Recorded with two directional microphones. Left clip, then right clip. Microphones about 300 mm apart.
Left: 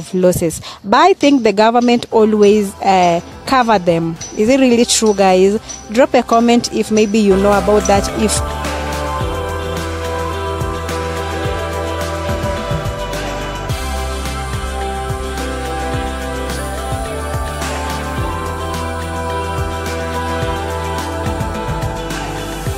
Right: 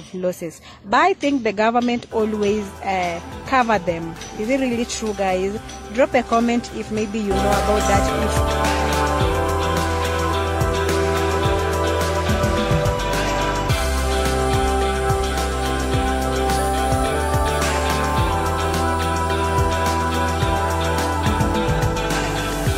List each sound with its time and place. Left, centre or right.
0.2 s speech: left